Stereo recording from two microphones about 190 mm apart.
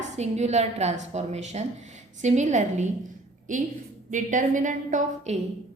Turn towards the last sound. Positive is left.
turn(degrees=-40)  # may be behind; listen again after turning